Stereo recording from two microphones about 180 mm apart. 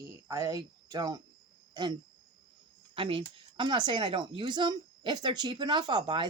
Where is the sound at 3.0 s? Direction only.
30° right (ahead or behind).